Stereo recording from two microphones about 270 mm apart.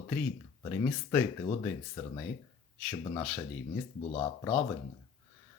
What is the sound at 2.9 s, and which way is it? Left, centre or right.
Speech, centre.